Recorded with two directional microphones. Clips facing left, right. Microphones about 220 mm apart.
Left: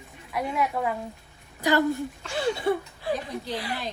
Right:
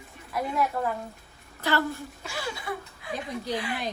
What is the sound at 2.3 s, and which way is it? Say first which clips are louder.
Speech: left 10 dB; 25° left (ahead or behind).